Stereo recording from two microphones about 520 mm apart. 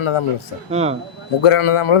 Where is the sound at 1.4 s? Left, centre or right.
Left.